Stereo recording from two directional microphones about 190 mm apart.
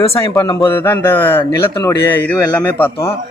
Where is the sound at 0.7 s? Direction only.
10° left (ahead or behind).